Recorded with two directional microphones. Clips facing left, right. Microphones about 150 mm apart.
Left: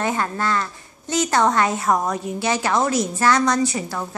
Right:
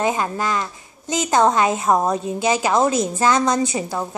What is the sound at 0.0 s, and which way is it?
A woman's voice, 15° right (ahead or behind).